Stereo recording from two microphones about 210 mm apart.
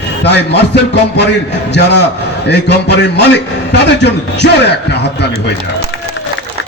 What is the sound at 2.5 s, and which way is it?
A man's voice, 55° left (ahead or behind).